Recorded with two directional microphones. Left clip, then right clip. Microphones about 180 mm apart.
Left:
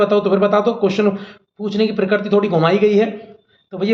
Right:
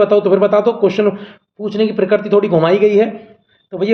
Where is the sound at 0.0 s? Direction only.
40° right (ahead or behind).